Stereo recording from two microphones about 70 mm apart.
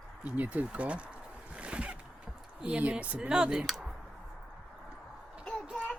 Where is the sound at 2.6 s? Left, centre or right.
Centre.